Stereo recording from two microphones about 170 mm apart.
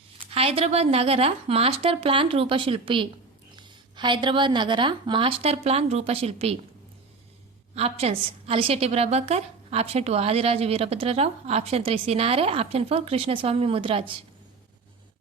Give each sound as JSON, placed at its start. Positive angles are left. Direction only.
{"t": 0.3, "sound": "a woman's voice", "side_deg": -35}
{"t": 7.8, "sound": "a woman's voice", "side_deg": -35}